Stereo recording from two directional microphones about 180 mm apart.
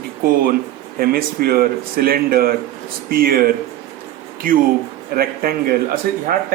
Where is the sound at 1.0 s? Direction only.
55° right (ahead or behind).